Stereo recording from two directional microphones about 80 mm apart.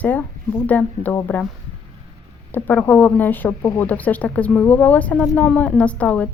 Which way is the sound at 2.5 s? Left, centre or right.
Left.